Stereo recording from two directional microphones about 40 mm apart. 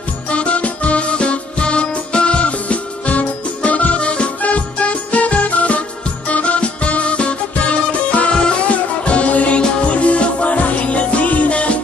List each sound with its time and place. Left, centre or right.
0.3 s music: left
8.3 s music: left